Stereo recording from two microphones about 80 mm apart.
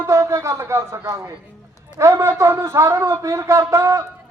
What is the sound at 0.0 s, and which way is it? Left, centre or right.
A man's voice, right.